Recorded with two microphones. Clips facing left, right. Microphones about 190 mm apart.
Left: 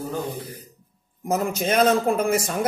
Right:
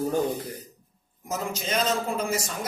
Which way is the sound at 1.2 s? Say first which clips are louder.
Left 7 dB; 55° left (ahead or behind).